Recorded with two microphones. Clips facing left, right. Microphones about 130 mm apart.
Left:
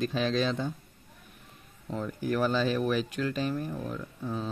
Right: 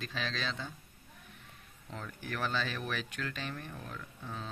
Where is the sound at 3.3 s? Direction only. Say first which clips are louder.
Left 11 dB; 35° left (ahead or behind).